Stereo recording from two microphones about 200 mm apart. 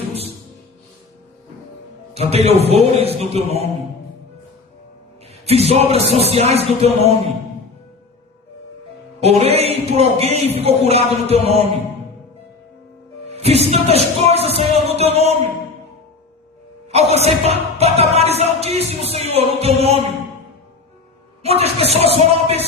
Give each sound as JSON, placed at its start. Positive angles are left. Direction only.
{"t": 2.1, "sound": "speech", "side_deg": -30}
{"t": 5.5, "sound": "speech", "side_deg": -30}
{"t": 9.2, "sound": "speech", "side_deg": -30}
{"t": 13.2, "sound": "speech", "side_deg": -30}
{"t": 16.9, "sound": "speech", "side_deg": -30}
{"t": 21.4, "sound": "speech", "side_deg": -30}